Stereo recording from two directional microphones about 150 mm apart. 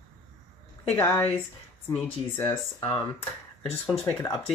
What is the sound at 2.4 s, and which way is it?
Speech, 20° left (ahead or behind).